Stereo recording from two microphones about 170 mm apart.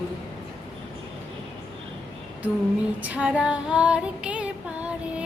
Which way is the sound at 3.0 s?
10° right (ahead or behind).